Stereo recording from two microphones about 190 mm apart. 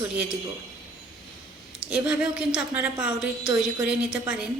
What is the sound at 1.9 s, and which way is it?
A woman's voice, 5° right (ahead or behind).